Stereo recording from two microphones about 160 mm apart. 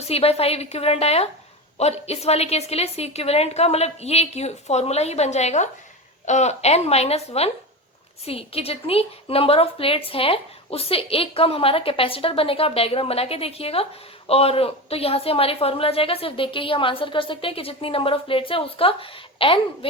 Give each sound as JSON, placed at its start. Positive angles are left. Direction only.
{"t": 0.0, "sound": "a woman's voice", "side_deg": 40}